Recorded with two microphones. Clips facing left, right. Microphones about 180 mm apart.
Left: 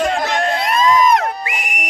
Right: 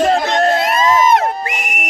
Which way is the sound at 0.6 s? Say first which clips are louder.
Right 1 dB; 5° right (ahead or behind).